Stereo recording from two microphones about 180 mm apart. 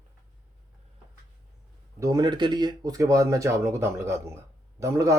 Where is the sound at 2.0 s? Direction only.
20° right (ahead or behind).